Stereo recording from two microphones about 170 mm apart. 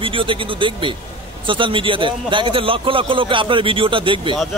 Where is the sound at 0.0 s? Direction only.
30° right (ahead or behind).